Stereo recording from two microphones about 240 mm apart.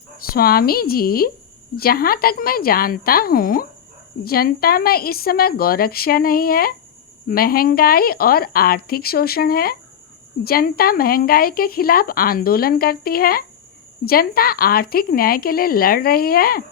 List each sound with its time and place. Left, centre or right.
0.3 s speech: left